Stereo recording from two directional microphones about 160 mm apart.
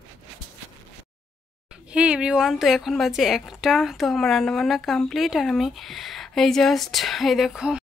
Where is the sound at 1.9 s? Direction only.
5° right (ahead or behind).